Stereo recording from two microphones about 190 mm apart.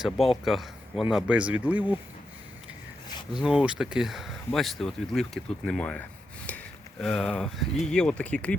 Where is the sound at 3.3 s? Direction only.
5° right (ahead or behind).